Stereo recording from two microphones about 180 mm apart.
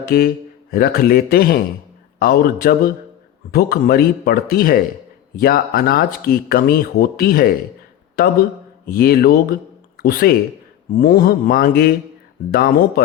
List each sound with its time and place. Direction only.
0.1 s speech: 55° left (ahead or behind)